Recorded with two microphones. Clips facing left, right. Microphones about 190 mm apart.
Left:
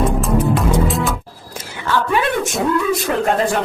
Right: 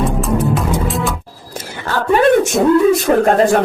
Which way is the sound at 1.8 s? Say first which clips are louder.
Right 5 dB; 45° right (ahead or behind).